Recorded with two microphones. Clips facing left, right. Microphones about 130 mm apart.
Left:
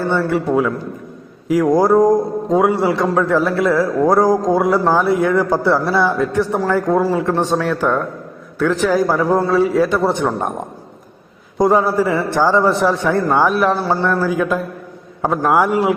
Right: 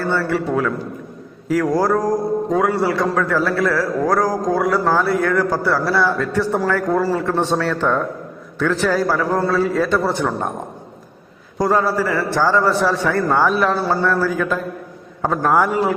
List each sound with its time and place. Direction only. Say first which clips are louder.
0.0 s a man's voice: left 2 dB; 15° left (ahead or behind)
11.5 s a man's voice: left 3 dB; 20° left (ahead or behind)